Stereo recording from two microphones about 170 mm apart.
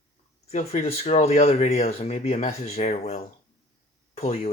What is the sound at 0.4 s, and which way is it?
Speech, 40° left (ahead or behind).